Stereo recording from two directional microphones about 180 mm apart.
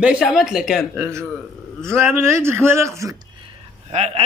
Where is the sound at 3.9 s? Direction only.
35° right (ahead or behind).